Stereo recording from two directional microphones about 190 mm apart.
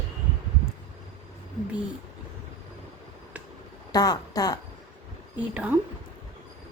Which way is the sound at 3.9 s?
20° left (ahead or behind).